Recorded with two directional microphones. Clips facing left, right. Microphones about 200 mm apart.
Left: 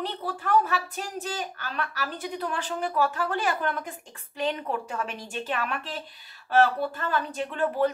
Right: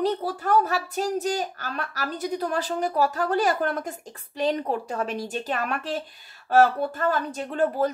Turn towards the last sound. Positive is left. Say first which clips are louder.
# right 2 dB
turn(degrees=-40)  # may be behind; listen again after turning